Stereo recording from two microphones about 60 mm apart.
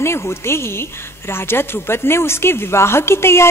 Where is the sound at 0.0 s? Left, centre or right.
Left.